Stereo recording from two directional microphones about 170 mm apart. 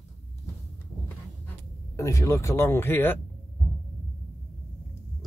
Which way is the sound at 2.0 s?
20° left (ahead or behind).